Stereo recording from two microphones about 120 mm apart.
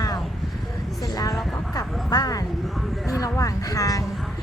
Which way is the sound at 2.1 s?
30° left (ahead or behind).